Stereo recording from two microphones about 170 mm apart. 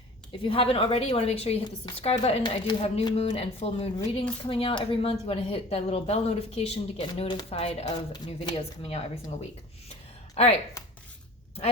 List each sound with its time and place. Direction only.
0.4 s speech: 30° left (ahead or behind)
10.3 s speech: 40° left (ahead or behind)